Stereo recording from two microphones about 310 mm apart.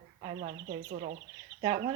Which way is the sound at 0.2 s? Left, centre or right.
Right.